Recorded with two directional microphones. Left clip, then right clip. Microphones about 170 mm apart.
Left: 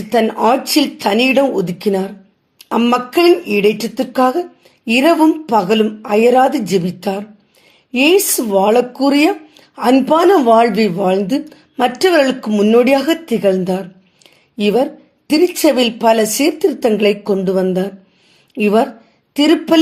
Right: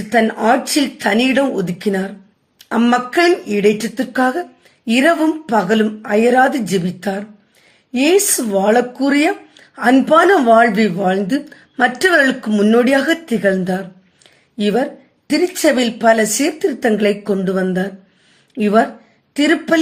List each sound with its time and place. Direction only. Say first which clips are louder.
0.1 s speech: left 1 dB; 20° left (ahead or behind)